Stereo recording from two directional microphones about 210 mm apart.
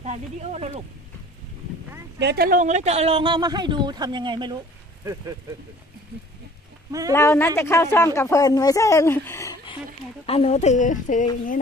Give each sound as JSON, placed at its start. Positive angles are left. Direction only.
{"t": 0.0, "sound": "speech", "side_deg": -30}
{"t": 2.1, "sound": "speech", "side_deg": -50}
{"t": 7.1, "sound": "speech", "side_deg": 10}
{"t": 10.2, "sound": "speech", "side_deg": 30}